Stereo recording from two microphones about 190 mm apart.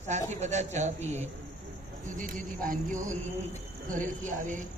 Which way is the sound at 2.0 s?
45° right (ahead or behind).